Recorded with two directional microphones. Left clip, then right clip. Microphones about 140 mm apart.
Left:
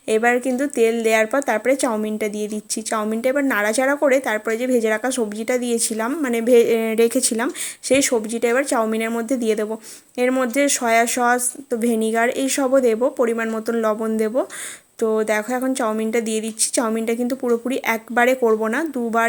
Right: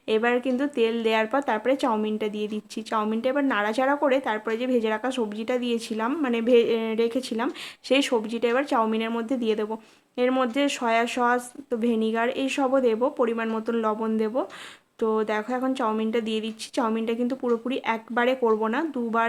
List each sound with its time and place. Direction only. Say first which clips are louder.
0.1 s speech: left 5 dB; 25° left (ahead or behind)